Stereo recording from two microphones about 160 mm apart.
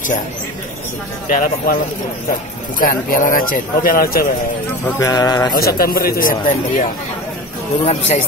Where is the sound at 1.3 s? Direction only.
60° left (ahead or behind).